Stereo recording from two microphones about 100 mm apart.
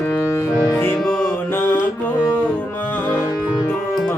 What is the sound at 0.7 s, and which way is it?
Music, 25° left (ahead or behind).